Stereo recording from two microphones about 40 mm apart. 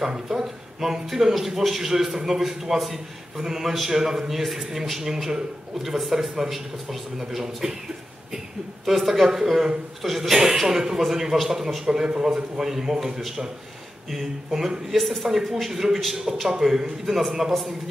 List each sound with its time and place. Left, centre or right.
0.0 s a man's voice: centre
8.8 s a man's voice: centre
14.5 s a man's voice: centre
14.9 s a man's voice: centre